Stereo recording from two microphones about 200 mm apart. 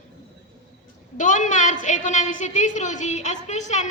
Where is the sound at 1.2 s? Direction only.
40° left (ahead or behind).